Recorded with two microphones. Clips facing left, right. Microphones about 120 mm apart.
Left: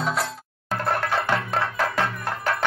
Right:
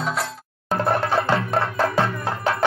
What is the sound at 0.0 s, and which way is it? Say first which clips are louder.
Music: even; centre (ahead or behind).